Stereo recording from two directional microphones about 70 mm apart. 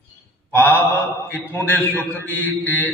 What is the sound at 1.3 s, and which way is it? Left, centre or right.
A man's voice, left.